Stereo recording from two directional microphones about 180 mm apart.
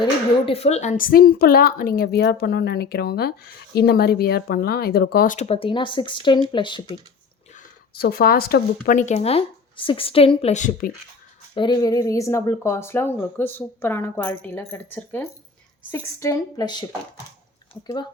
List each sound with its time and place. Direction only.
0.0 s speech: 30° left (ahead or behind); by 5.5 s 50° left (ahead or behind)
5.5 s speech: 30° left (ahead or behind)
7.5 s speech: 60° left (ahead or behind)
11.5 s speech: 25° left (ahead or behind)